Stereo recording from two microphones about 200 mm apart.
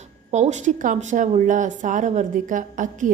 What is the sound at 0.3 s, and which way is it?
A woman's voice, 35° right (ahead or behind).